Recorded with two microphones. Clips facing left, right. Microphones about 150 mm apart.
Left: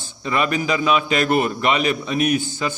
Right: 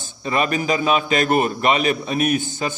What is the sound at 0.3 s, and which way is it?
A man's voice, 35° right (ahead or behind).